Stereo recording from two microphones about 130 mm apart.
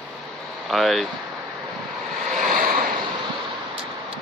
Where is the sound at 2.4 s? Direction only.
90° right.